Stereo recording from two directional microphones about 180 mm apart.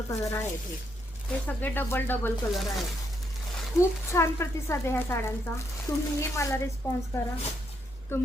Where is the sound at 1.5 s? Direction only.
10° left (ahead or behind).